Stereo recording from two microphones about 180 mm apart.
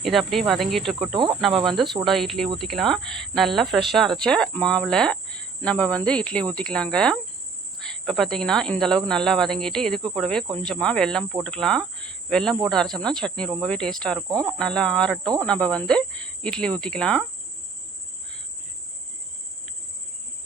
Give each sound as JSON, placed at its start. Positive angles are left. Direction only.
{"t": 0.0, "sound": "speech", "side_deg": 0}
{"t": 1.1, "sound": "cricket", "side_deg": -25}
{"t": 1.4, "sound": "speech", "side_deg": 0}
{"t": 12.0, "sound": "cricket", "side_deg": 5}
{"t": 12.6, "sound": "speech", "side_deg": 0}